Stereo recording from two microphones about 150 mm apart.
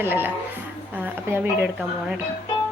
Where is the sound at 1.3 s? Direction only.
15° right (ahead or behind).